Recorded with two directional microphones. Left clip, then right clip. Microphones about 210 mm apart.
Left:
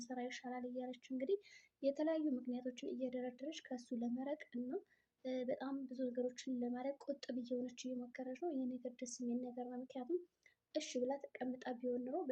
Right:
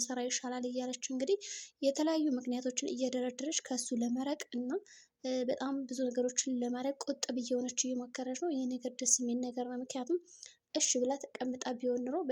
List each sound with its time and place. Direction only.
0.0 s speech: 50° right (ahead or behind)